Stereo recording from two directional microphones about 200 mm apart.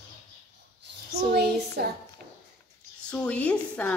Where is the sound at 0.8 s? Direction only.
55° right (ahead or behind).